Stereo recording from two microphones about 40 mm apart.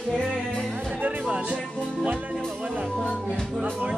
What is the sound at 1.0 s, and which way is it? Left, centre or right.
Music, right.